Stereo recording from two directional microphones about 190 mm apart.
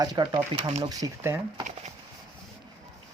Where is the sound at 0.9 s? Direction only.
20° right (ahead or behind).